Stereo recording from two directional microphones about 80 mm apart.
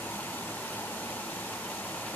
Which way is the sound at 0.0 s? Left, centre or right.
Left.